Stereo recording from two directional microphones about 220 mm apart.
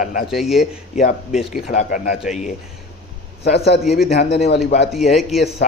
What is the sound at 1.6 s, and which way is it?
Speech, 40° left (ahead or behind).